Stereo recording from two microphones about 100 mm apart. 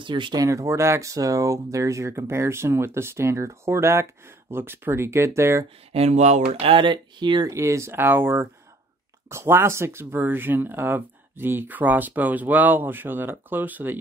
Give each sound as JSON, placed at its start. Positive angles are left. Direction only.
{"t": 0.0, "sound": "speech", "side_deg": -55}
{"t": 0.4, "sound": "speech", "side_deg": -30}
{"t": 5.9, "sound": "speech", "side_deg": -90}
{"t": 7.4, "sound": "speech", "side_deg": -30}